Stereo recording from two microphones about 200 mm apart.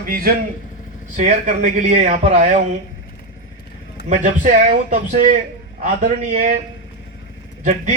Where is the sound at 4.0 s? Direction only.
55° left (ahead or behind).